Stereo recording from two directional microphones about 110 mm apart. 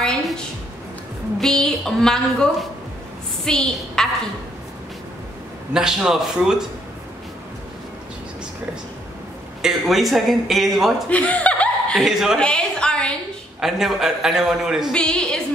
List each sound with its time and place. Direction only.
0.0 s a sound: 5° left (ahead or behind)
1.4 s a woman's voice: 5° left (ahead or behind)
5.7 s a man's voice: 5° right (ahead or behind)
9.6 s a man's voice: centre (ahead or behind)
11.1 s laughter: 15° left (ahead or behind)
12.0 s a man's voice: 5° right (ahead or behind)
12.4 s a sound: 10° left (ahead or behind)
13.6 s a man's voice: 5° right (ahead or behind)
15.0 s a woman's voice: 10° left (ahead or behind)